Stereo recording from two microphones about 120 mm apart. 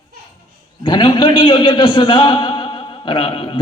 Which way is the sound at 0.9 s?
40° left (ahead or behind).